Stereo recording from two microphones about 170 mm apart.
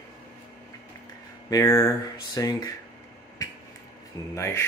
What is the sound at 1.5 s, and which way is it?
Speech, 20° left (ahead or behind).